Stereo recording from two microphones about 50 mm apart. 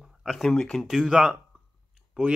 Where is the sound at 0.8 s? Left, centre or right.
Centre.